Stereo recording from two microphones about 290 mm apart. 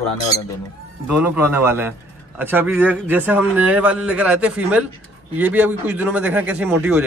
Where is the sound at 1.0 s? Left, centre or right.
Centre.